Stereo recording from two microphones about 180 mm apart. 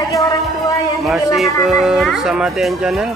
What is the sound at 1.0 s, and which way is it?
Speech, centre (ahead or behind).